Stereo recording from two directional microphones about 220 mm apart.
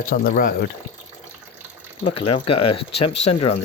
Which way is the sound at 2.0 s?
25° left (ahead or behind).